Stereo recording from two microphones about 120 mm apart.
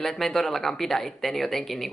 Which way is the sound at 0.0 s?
5° left (ahead or behind).